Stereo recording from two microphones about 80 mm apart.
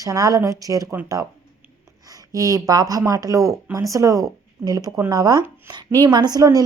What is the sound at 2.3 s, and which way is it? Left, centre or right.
A woman's voice, right.